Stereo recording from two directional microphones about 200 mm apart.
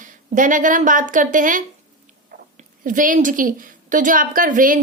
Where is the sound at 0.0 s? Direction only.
40° right (ahead or behind).